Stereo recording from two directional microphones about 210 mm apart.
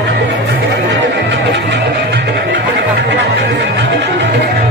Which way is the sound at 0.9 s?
55° right (ahead or behind).